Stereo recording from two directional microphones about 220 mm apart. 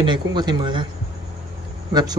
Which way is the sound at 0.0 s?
20° right (ahead or behind).